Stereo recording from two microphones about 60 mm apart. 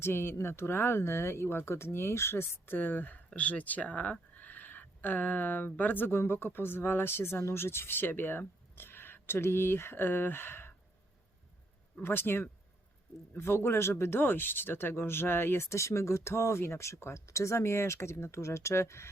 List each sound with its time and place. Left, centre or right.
0.0 s speech: left
12.0 s speech: left